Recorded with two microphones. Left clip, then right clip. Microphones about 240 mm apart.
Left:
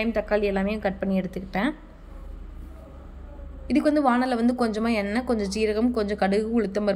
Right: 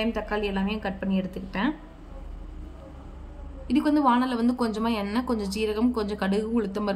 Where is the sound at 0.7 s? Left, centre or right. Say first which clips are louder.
Left 4 dB; centre.